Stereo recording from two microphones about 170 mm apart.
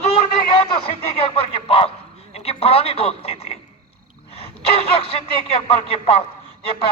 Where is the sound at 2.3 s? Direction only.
35° left (ahead or behind).